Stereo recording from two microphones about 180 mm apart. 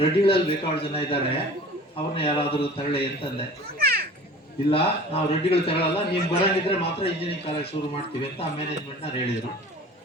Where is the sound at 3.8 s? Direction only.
60° right (ahead or behind).